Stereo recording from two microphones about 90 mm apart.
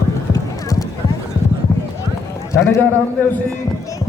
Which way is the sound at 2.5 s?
35° left (ahead or behind).